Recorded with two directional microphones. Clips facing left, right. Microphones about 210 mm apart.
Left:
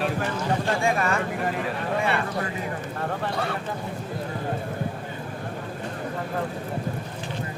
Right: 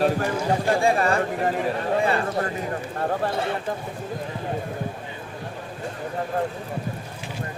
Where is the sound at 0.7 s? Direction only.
35° right (ahead or behind).